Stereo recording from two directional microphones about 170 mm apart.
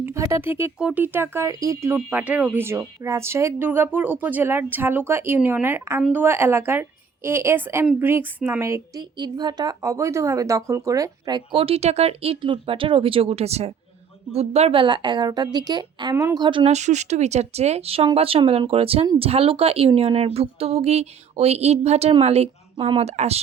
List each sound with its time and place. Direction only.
0.0 s a woman's voice: 15° right (ahead or behind); by 23.4 s 40° right (ahead or behind)